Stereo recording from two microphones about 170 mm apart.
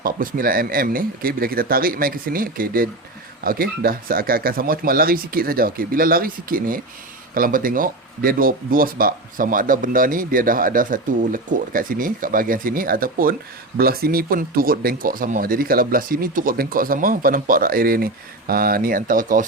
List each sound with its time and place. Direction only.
0.0 s speech: 55° right (ahead or behind)